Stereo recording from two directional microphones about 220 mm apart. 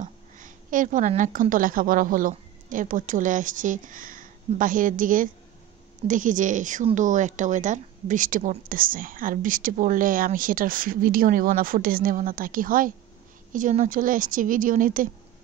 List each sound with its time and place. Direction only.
0.0 s a woman's voice: 35° right (ahead or behind)